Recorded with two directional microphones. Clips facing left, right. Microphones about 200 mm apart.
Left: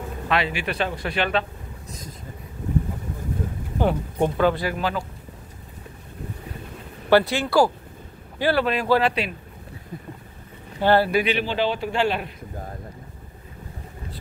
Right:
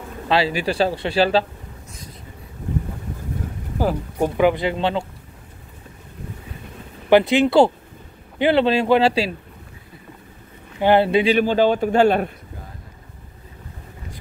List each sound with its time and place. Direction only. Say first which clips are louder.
0.3 s speech: right 5 dB; 35° right (ahead or behind)
3.7 s speech: right 1 dB; 5° right (ahead or behind)
4.4 s a man's voice: right 7 dB; 20° right (ahead or behind)
7.1 s a man's voice: right 4 dB; 20° right (ahead or behind)
10.8 s a man's voice: right 3 dB; 20° right (ahead or behind)
11.3 s a man's voice: right 7 dB; 45° right (ahead or behind)